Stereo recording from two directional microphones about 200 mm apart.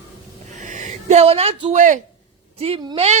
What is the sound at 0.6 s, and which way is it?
A woman's voice, 40° right (ahead or behind).